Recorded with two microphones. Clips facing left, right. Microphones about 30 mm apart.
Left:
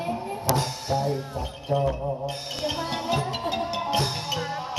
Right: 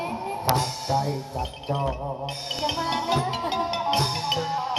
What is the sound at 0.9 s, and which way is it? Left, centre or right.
Music, right.